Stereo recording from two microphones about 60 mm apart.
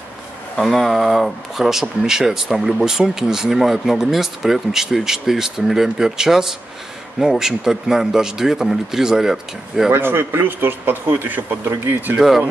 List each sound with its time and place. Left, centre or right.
0.6 s speech: centre
9.8 s speech: right
12.2 s speech: centre